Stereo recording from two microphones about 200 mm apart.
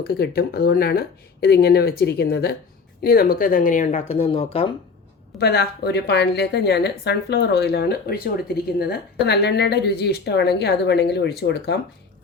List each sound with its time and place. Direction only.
0.0 s speech: 50° left (ahead or behind); by 4.4 s 30° left (ahead or behind)
5.4 s a woman's voice: 55° left (ahead or behind)